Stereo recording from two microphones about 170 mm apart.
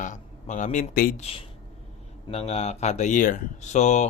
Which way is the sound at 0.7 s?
60° left (ahead or behind).